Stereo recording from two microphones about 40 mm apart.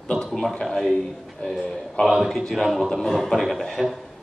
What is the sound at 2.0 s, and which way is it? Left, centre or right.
Speech, left.